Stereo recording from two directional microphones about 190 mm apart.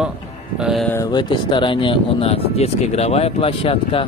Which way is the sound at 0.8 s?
15° left (ahead or behind).